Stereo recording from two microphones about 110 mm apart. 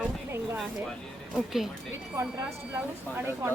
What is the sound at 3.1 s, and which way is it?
Speech, 20° right (ahead or behind).